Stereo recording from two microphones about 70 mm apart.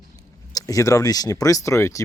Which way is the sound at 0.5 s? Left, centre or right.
Left.